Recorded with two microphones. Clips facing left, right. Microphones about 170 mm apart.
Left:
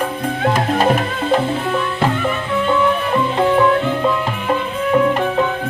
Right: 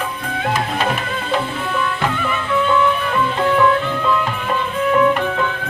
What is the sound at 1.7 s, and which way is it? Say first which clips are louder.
Music: left 3 dB; 40° left (ahead or behind).